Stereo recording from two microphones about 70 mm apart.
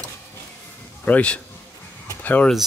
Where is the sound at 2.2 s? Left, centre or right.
Left.